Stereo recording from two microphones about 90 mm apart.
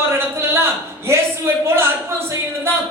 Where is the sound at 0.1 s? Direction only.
30° right (ahead or behind).